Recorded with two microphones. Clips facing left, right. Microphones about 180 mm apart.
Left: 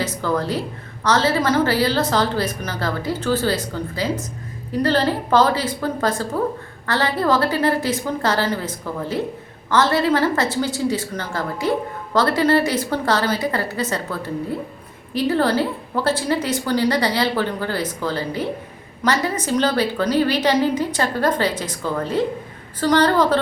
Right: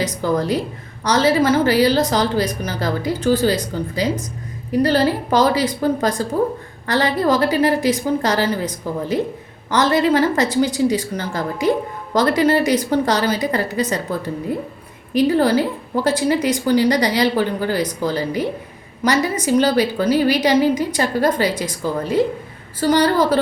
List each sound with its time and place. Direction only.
0.3 s a woman's voice: 15° right (ahead or behind)